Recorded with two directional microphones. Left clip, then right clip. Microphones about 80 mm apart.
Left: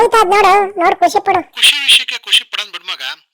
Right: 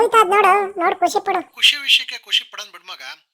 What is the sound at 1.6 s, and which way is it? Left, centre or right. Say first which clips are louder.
Speech: left 5 dB; left.